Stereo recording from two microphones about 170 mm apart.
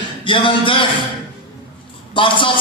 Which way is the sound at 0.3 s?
30° left (ahead or behind).